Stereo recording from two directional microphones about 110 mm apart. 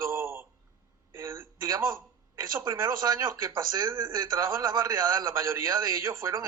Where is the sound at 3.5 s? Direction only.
45° right (ahead or behind); by 6.4 s 25° right (ahead or behind).